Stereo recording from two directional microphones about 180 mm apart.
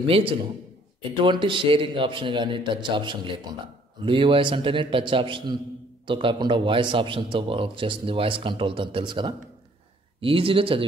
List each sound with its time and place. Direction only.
0.0 s a man's voice: 30° right (ahead or behind)